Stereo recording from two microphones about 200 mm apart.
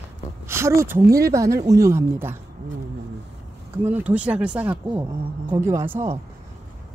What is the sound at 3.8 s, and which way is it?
Speech, 10° right (ahead or behind).